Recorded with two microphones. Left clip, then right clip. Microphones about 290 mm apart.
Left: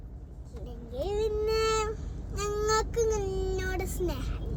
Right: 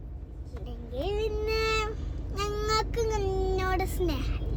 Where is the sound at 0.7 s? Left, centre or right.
Centre.